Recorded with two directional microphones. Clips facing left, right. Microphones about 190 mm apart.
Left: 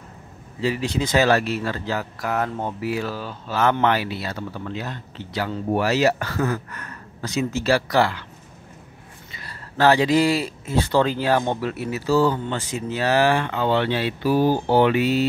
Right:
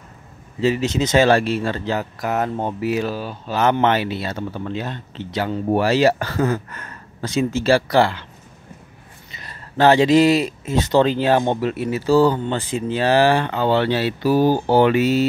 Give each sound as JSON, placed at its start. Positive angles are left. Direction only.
{"t": 0.6, "sound": "speech", "side_deg": -25}
{"t": 9.4, "sound": "speech", "side_deg": -20}